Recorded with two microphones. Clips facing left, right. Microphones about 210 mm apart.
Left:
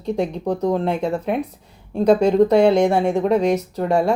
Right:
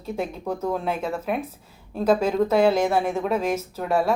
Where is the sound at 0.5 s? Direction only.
15° left (ahead or behind).